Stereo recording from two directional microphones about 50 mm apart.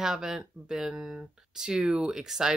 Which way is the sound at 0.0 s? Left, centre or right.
Centre.